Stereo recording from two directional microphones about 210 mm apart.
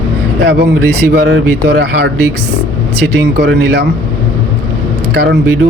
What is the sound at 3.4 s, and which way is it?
Speech, 50° right (ahead or behind).